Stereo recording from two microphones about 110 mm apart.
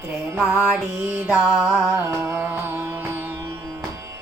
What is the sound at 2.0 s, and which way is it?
Carnatic music, 20° right (ahead or behind).